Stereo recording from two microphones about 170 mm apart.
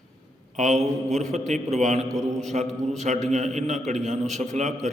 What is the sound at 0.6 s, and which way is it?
A man's voice, 45° right (ahead or behind).